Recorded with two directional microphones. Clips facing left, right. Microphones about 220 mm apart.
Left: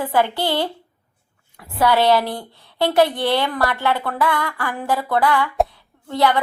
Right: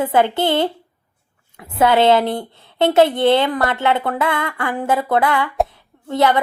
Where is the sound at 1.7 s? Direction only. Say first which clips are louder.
Right 3 dB; 20° right (ahead or behind).